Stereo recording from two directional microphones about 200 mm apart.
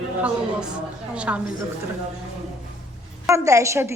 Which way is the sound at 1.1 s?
5° right (ahead or behind).